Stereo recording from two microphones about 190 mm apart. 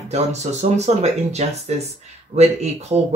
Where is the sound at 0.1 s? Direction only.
35° right (ahead or behind).